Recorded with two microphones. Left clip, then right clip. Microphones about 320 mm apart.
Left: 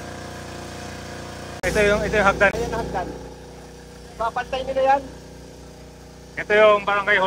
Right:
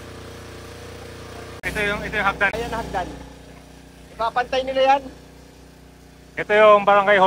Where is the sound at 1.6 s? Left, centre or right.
Centre.